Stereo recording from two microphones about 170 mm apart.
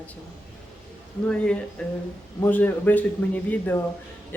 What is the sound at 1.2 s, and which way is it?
Speech, 5° left (ahead or behind).